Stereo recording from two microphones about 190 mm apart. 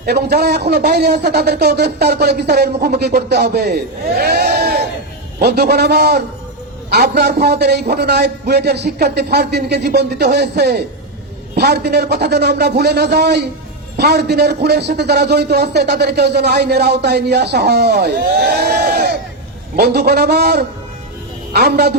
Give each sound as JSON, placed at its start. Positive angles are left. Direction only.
{"t": 0.0, "sound": "a man's voice", "side_deg": -55}
{"t": 4.2, "sound": "sheep", "side_deg": -55}
{"t": 5.4, "sound": "a man's voice", "side_deg": -55}